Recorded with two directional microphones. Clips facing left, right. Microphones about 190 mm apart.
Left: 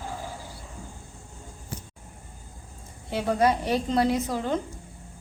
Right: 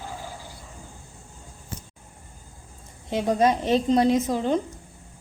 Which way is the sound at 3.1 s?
20° right (ahead or behind).